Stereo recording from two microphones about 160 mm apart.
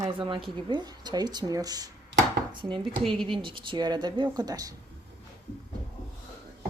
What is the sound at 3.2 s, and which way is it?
Speech, 30° right (ahead or behind).